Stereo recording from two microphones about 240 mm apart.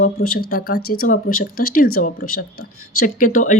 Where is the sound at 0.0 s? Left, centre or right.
Left.